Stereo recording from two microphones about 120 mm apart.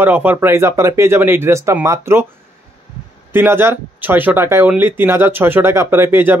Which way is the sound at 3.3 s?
20° right (ahead or behind).